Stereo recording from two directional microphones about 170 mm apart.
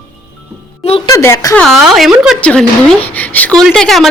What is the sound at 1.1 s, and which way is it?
Speech, 15° left (ahead or behind).